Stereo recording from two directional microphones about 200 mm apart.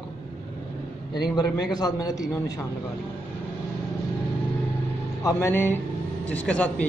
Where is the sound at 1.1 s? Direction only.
20° left (ahead or behind).